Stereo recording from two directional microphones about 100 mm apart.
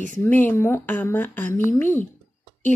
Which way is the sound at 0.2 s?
20° left (ahead or behind).